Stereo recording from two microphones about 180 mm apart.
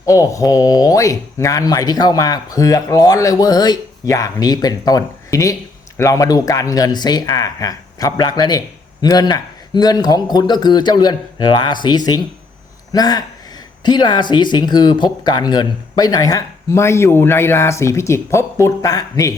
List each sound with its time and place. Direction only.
0.0 s speech: 20° left (ahead or behind)